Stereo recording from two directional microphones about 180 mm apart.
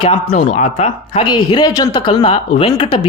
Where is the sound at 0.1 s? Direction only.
40° left (ahead or behind).